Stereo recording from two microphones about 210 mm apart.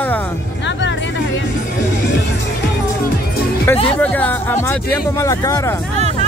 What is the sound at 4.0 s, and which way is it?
Speech, 10° left (ahead or behind).